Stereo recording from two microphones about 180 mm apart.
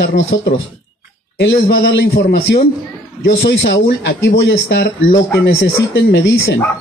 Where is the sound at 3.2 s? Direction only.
80° left.